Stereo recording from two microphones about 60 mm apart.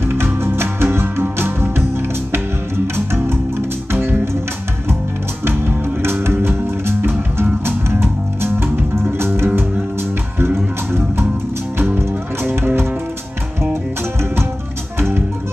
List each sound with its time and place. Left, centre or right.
0.0 s music: right
5.6 s music: right
15.0 s music: right